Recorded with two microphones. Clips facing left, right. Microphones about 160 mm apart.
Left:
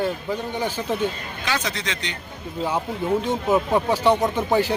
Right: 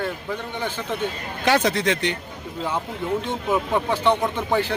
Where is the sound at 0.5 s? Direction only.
10° left (ahead or behind).